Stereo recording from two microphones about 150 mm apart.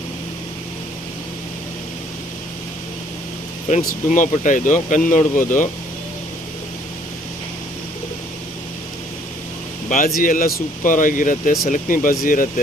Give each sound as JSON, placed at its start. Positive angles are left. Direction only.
{"t": 3.7, "sound": "speech", "side_deg": 60}
{"t": 10.2, "sound": "speech", "side_deg": 65}